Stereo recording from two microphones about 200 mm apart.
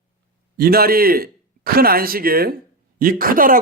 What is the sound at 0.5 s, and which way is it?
A man's voice, 50° right (ahead or behind).